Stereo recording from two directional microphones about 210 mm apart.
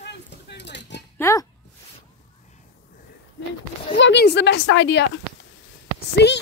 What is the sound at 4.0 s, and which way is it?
A woman's voice, 55° left (ahead or behind).